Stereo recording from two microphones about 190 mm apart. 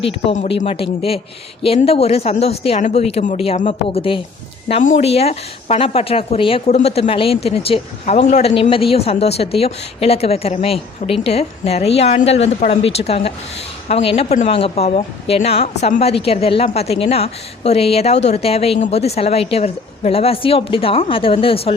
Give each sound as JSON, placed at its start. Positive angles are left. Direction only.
{"t": 0.4, "sound": "speech", "side_deg": 30}